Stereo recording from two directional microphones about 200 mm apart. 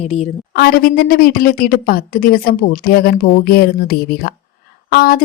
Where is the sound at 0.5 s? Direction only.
50° left (ahead or behind).